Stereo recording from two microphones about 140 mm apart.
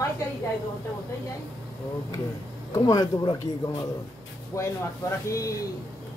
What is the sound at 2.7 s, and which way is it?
Speech, 25° left (ahead or behind).